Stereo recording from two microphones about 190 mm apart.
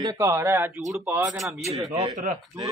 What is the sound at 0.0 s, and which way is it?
A man's voice, 20° right (ahead or behind).